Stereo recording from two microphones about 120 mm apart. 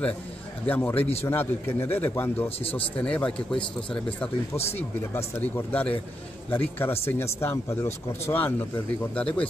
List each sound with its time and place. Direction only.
0.7 s a man's voice: 15° left (ahead or behind)